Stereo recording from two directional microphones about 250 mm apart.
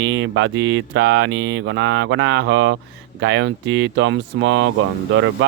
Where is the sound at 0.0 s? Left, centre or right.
Right.